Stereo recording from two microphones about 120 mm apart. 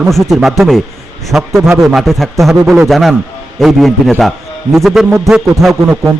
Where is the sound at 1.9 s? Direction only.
Centre (ahead or behind).